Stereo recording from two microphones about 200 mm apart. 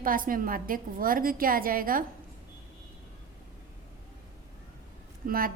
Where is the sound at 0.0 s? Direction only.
45° right (ahead or behind).